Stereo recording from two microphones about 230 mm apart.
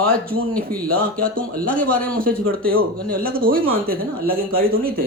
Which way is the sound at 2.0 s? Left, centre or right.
Right.